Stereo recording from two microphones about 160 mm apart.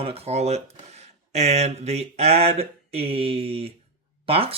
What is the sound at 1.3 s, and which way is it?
Mantra, 45° right (ahead or behind).